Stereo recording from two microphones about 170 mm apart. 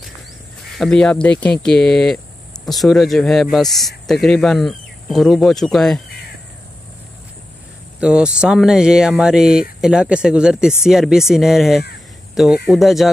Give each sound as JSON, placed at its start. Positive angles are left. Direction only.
{"t": 0.7, "sound": "speech", "side_deg": 5}
{"t": 8.0, "sound": "speech", "side_deg": -5}